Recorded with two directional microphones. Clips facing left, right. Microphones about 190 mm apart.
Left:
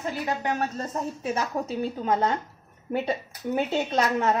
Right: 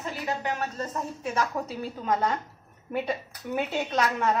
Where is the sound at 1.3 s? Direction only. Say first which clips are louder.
Even; 25° left (ahead or behind).